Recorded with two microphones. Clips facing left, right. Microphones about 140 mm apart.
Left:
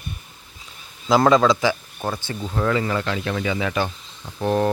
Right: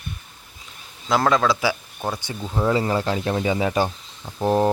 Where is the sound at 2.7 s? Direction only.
30° right (ahead or behind).